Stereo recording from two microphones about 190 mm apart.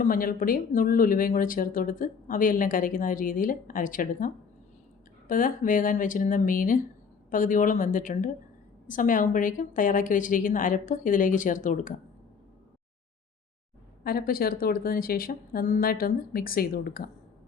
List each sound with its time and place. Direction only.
0.0 s speech: 45° left (ahead or behind)
5.3 s speech: 45° left (ahead or behind)
14.0 s speech: 50° left (ahead or behind)